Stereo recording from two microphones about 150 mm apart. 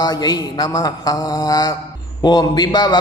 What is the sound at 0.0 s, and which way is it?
Mantra, 25° left (ahead or behind).